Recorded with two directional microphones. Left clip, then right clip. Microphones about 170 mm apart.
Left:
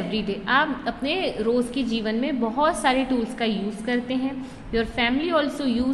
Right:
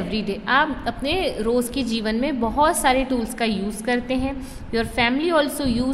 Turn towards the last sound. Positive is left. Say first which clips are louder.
# right 1 dB
turn(degrees=-20)  # may be behind; listen again after turning